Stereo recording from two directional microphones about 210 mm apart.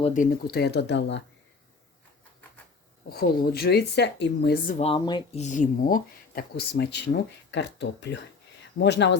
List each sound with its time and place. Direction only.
0.0 s speech: 40° left (ahead or behind); by 1.2 s 55° left (ahead or behind)
3.1 s speech: 45° left (ahead or behind); by 5.4 s 20° left (ahead or behind)
5.4 s speech: 35° left (ahead or behind); by 9.1 s 55° left (ahead or behind)